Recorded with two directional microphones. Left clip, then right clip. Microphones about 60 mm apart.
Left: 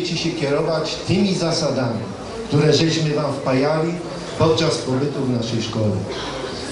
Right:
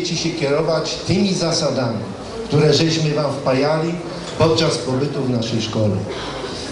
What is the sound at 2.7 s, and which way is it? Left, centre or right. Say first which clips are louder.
Speech: right 1 dB; centre.